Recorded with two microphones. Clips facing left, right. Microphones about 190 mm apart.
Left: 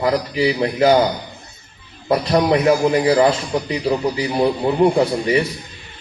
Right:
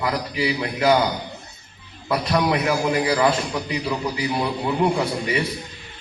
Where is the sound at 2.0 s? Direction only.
30° left (ahead or behind).